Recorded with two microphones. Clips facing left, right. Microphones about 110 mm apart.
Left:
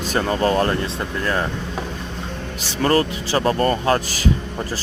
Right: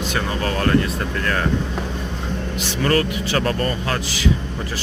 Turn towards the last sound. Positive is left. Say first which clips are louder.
# left 5 dB
turn(degrees=30)  # may be behind; listen again after turning